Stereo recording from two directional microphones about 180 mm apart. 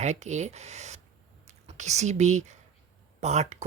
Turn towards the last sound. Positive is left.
turn(degrees=-40)  # may be behind; listen again after turning